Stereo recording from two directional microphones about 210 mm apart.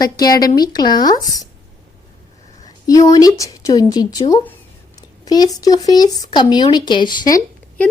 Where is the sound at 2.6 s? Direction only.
15° left (ahead or behind).